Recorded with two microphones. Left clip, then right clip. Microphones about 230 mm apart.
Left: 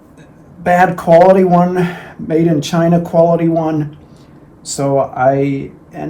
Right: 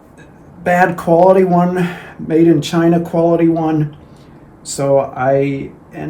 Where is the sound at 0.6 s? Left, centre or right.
Left.